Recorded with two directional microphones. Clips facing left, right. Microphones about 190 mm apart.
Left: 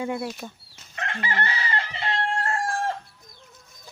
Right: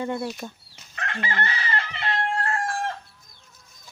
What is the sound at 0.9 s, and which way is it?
Chicken, 30° left (ahead or behind).